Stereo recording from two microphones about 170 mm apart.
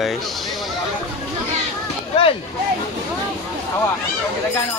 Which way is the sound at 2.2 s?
30° left (ahead or behind).